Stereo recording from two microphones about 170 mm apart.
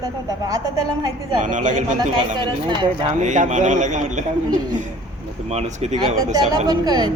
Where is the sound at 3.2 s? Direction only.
45° right (ahead or behind).